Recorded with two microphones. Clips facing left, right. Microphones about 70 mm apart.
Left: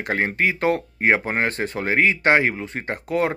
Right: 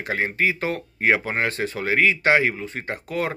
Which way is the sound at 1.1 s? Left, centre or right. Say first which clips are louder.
Left 1 dB; left.